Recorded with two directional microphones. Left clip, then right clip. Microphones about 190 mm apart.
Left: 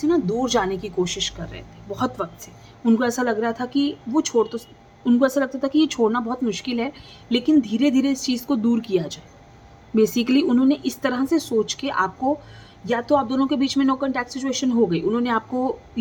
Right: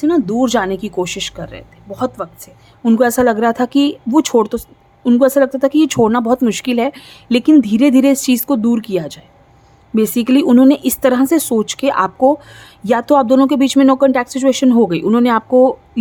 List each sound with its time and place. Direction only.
0.1 s speech: 55° right (ahead or behind)
1.4 s speech: 35° right (ahead or behind)
2.8 s speech: 40° right (ahead or behind); by 4.5 s 55° right (ahead or behind)
5.0 s speech: 35° right (ahead or behind)
8.4 s speech: 35° right (ahead or behind)